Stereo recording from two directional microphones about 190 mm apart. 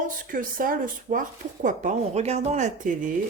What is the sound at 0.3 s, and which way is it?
Speech, 45° right (ahead or behind).